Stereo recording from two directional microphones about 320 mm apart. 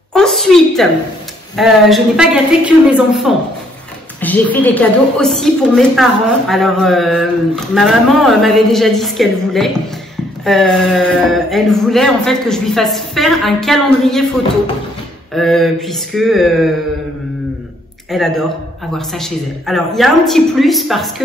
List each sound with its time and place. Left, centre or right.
0.1 s a woman's voice: centre
15.3 s a woman's voice: centre
18.1 s a woman's voice: centre